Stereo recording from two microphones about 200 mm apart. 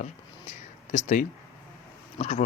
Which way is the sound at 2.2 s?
35° left (ahead or behind).